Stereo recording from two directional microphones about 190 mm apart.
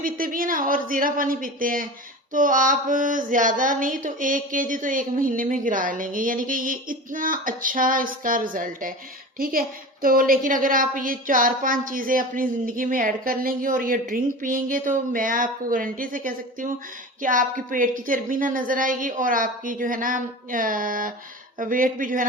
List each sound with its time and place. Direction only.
0.0 s a woman's voice: 45° right (ahead or behind)